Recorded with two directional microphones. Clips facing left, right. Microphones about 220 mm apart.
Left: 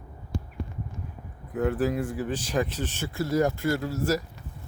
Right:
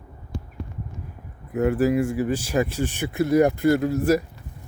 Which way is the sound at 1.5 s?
10° right (ahead or behind).